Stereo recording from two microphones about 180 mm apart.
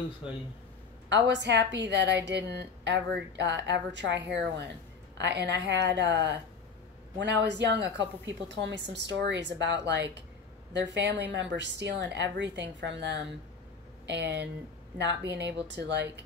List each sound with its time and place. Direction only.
1.3 s a woman's voice: 75° right (ahead or behind)